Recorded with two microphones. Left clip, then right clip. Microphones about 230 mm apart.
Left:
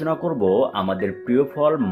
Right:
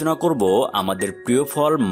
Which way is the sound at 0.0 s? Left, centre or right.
Right.